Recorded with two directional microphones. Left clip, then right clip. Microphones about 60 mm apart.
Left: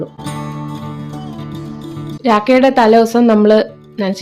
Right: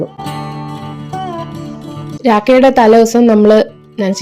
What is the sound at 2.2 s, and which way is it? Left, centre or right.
Speech, right.